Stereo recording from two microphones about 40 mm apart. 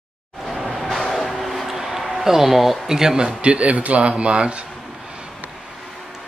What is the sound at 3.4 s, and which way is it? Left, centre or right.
Speech, right.